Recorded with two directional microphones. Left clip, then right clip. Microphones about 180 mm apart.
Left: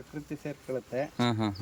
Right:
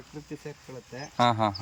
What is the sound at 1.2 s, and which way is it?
Speech, 15° left (ahead or behind).